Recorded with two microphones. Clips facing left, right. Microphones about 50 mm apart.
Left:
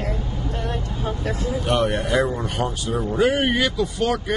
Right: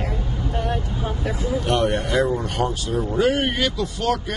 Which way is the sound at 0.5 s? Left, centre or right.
Centre.